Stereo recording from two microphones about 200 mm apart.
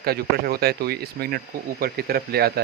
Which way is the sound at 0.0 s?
50° right (ahead or behind).